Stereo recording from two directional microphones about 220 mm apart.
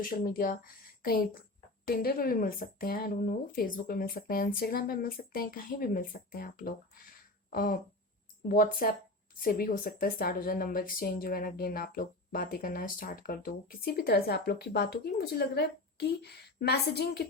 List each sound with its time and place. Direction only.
0.0 s a woman's voice: 40° left (ahead or behind)